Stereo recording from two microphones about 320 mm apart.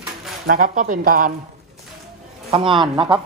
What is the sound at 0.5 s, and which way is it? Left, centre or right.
Speech, right.